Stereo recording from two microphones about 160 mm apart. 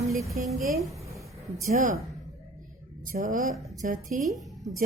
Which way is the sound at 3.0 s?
60° right (ahead or behind).